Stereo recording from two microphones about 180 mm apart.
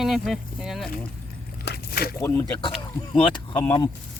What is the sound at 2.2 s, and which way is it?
Speech, 15° left (ahead or behind).